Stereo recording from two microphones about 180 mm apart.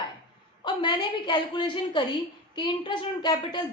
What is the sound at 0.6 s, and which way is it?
A woman's voice, 25° left (ahead or behind).